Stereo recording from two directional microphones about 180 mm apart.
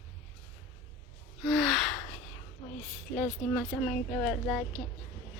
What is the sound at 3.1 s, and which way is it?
Speech, 5° left (ahead or behind).